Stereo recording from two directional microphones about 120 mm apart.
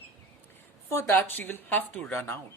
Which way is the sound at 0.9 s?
25° left (ahead or behind).